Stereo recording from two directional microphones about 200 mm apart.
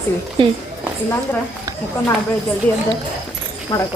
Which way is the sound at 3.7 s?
20° left (ahead or behind).